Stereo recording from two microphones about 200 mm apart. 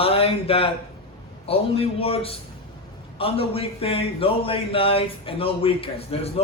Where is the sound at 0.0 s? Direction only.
30° left (ahead or behind).